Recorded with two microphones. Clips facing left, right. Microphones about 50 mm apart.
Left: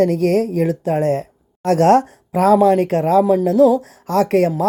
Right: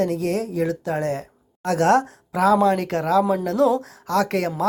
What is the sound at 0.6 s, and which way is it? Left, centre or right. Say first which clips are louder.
Speech: left 5 dB; left.